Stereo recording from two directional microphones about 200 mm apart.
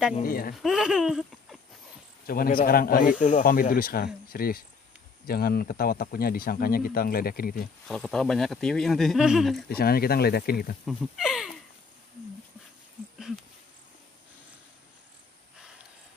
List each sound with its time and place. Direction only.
0.2 s a man's voice: 45° left (ahead or behind)
0.6 s speech: centre (ahead or behind)
2.2 s a man's voice: 45° left (ahead or behind)
7.9 s speech: 5° left (ahead or behind)
9.7 s a man's voice: 50° left (ahead or behind)
10.9 s speech: centre (ahead or behind)